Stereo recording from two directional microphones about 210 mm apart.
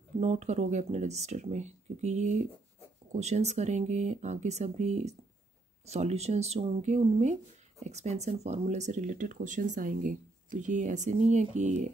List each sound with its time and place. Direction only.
0.2 s speech: 30° right (ahead or behind)